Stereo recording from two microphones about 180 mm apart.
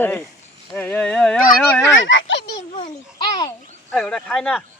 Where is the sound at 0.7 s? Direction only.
5° left (ahead or behind).